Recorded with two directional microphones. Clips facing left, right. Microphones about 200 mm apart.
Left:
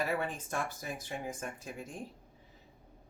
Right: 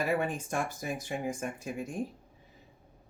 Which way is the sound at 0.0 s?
10° right (ahead or behind).